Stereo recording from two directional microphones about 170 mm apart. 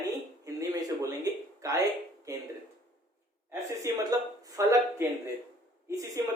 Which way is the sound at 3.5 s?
20° right (ahead or behind).